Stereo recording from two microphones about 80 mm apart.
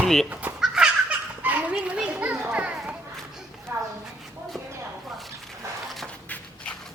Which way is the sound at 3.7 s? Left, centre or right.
Right.